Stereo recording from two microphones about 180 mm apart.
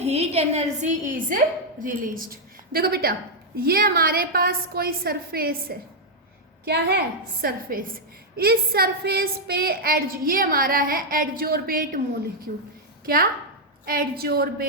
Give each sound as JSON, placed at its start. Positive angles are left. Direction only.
{"t": 0.0, "sound": "a woman's voice", "side_deg": -35}
{"t": 7.4, "sound": "a woman's voice", "side_deg": -50}
{"t": 13.8, "sound": "a woman's voice", "side_deg": -55}